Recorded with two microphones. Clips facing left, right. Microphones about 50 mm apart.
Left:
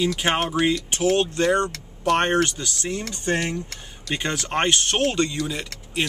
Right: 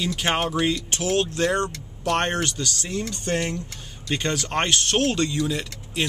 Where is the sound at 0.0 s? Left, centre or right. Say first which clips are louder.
Left 2 dB; centre.